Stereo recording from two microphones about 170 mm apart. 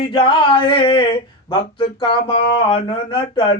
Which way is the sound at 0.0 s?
30° left (ahead or behind).